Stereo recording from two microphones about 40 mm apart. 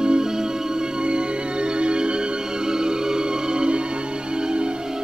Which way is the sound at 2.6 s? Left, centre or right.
Centre.